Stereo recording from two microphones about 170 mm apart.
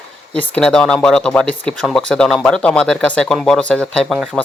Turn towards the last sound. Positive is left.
turn(degrees=0)  # may be behind; listen again after turning